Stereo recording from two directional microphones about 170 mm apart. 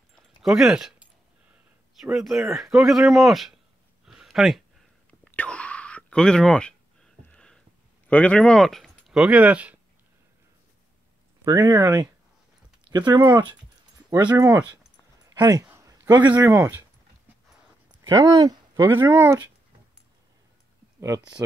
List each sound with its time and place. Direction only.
0.1 s a sound: centre (ahead or behind)
1.5 s speech: 5° right (ahead or behind)
4.0 s a sound: centre (ahead or behind)
8.1 s speech: 10° left (ahead or behind); by 9.8 s 10° right (ahead or behind)
11.4 s speech: 20° right (ahead or behind)
14.3 s speech: 15° right (ahead or behind)
15.2 s a sound: 20° right (ahead or behind)
16.3 s speech: 20° right (ahead or behind)
18.0 s speech: 20° right (ahead or behind)